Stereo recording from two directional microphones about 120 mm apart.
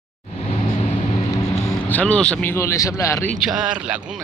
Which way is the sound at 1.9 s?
10° left (ahead or behind).